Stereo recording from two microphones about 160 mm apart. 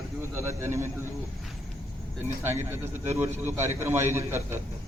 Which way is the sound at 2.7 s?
15° right (ahead or behind).